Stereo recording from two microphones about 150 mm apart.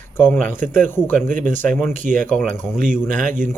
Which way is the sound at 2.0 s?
55° right (ahead or behind).